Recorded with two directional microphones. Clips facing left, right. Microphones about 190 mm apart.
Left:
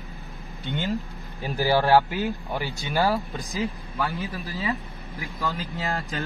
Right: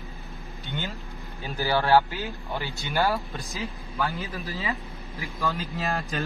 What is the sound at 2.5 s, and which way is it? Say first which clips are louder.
Speech: left 2 dB; 15° left (ahead or behind).